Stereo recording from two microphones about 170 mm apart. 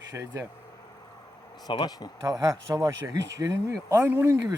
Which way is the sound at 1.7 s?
25° left (ahead or behind).